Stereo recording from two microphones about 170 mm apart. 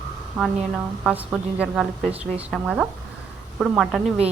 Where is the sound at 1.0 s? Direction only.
5° right (ahead or behind).